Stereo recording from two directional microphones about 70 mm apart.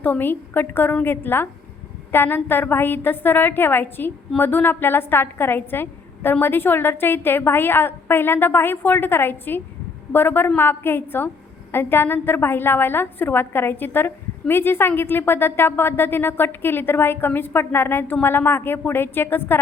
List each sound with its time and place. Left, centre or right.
0.0 s a woman's voice: left